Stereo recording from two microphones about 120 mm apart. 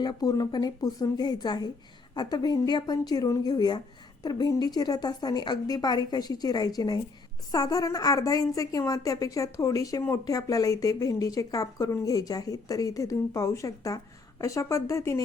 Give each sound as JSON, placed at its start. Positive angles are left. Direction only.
{"t": 0.0, "sound": "a woman's voice", "side_deg": 35}